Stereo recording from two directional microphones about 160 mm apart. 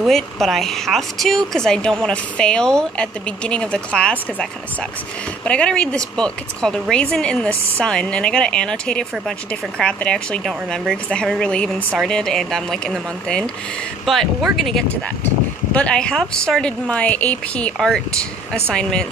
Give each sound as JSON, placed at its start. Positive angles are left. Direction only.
{"t": 0.0, "sound": "speech", "side_deg": 0}